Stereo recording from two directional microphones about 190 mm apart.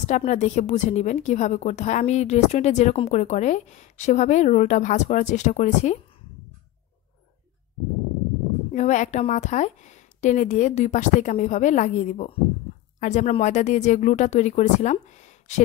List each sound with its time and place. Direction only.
0.0 s a woman's voice: 35° left (ahead or behind)
8.7 s a woman's voice: 40° left (ahead or behind)